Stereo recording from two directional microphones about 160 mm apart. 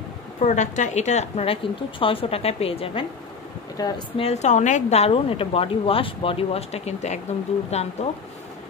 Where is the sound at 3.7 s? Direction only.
25° left (ahead or behind); by 8.1 s 40° left (ahead or behind).